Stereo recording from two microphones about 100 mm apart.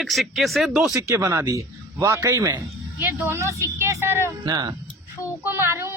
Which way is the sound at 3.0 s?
25° right (ahead or behind).